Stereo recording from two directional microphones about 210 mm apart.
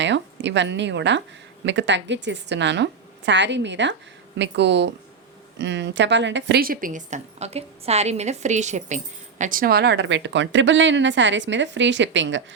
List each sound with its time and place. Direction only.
0.0 s a woman's voice: 60° right (ahead or behind)